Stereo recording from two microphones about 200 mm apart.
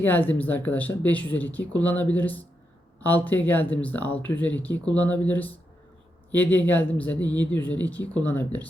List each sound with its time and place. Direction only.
0.0 s speech: 10° left (ahead or behind)